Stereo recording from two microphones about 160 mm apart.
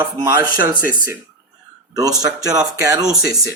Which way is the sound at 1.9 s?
25° right (ahead or behind).